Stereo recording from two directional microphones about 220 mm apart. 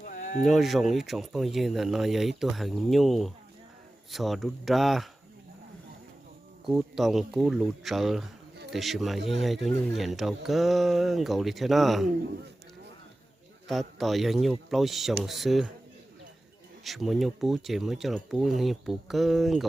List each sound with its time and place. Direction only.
0.0 s sheep: 35° left (ahead or behind)
0.4 s speech: centre (ahead or behind)
6.7 s speech: centre (ahead or behind)
13.7 s speech: centre (ahead or behind)
16.8 s speech: centre (ahead or behind)